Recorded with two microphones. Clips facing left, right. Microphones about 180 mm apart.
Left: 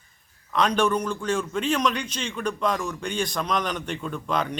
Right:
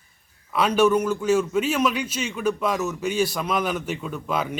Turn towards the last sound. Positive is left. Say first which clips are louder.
# even
turn(degrees=-5)  # may be behind; listen again after turning